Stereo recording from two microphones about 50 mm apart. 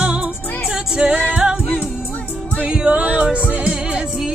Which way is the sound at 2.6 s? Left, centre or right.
Centre.